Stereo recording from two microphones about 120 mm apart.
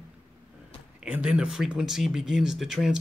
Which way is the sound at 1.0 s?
10° right (ahead or behind).